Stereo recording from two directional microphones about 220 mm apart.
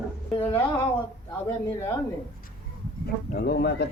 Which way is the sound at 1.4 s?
15° left (ahead or behind).